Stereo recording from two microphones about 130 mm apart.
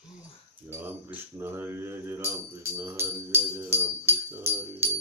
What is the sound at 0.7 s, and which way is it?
Speech, 15° right (ahead or behind).